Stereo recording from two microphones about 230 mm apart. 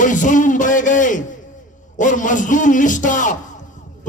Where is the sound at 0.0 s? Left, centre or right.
Left.